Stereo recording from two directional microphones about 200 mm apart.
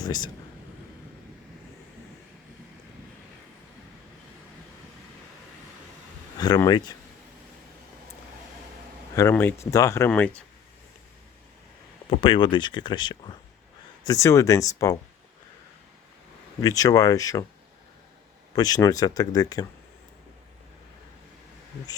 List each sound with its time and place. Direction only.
0.0 s speech: 20° left (ahead or behind)
6.3 s speech: 20° left (ahead or behind)
9.1 s speech: 10° left (ahead or behind)
12.1 s speech: 25° left (ahead or behind)
16.6 s speech: 15° left (ahead or behind)
18.5 s speech: 20° left (ahead or behind)